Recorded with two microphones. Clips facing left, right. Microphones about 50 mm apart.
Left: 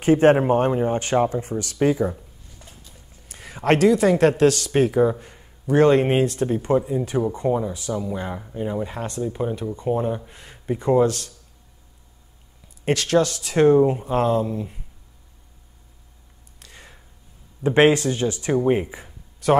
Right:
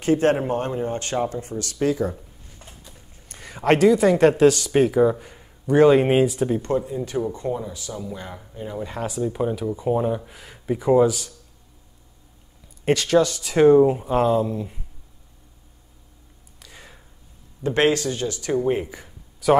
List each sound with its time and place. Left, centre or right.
0.0 s speech: left
2.6 s a sound: right
3.3 s speech: centre
6.6 s speech: centre
9.0 s speech: centre
12.6 s speech: centre
16.5 s a sound: centre
17.6 s speech: left